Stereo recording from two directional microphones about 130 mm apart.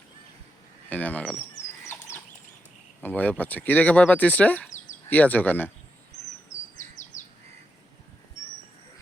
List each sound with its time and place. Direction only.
0.9 s a sound: 10° left (ahead or behind)
3.0 s speech: 15° left (ahead or behind)
6.5 s bird: 25° left (ahead or behind)